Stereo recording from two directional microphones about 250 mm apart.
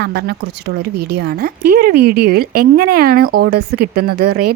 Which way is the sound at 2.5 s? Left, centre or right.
Right.